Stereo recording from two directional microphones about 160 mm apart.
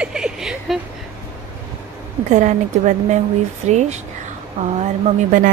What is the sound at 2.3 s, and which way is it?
Speech, 50° right (ahead or behind).